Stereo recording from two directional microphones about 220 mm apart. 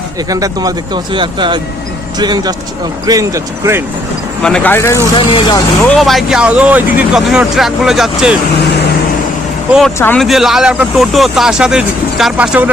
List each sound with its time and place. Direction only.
0.3 s speech: 15° right (ahead or behind)
4.4 s speech: 5° left (ahead or behind)
5.9 s speech: centre (ahead or behind)
10.0 s speech: 5° left (ahead or behind)